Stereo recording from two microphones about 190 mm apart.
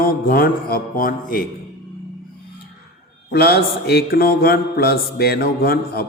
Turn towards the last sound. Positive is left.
turn(degrees=50)  # may be behind; listen again after turning